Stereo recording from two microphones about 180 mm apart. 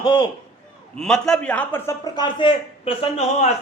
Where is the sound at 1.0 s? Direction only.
5° left (ahead or behind).